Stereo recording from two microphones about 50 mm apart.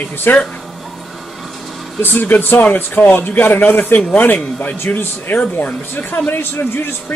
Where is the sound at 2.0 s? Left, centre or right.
Left.